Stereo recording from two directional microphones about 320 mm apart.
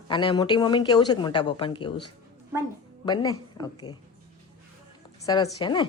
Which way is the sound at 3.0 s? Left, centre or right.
Centre.